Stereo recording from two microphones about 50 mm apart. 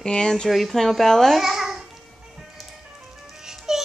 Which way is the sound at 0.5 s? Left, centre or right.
Centre.